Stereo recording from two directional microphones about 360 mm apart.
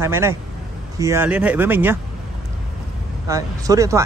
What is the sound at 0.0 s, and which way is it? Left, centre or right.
Speech, centre.